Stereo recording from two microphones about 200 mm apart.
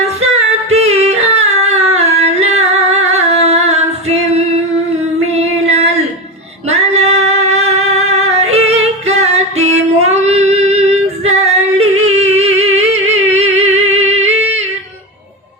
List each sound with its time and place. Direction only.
0.7 s music: 30° right (ahead or behind)
2.2 s singing: 35° right (ahead or behind)
5.3 s female singing: 30° right (ahead or behind)
6.7 s singing: 30° right (ahead or behind)